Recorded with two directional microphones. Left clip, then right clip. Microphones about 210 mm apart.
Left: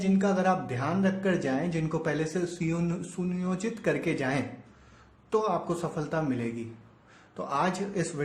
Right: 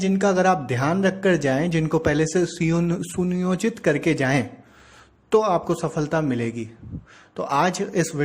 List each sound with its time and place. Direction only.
0.0 s speech: 35° right (ahead or behind)